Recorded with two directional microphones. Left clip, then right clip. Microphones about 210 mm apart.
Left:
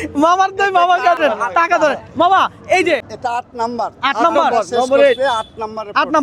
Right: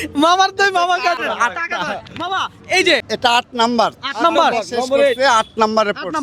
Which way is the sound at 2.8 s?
20° right (ahead or behind).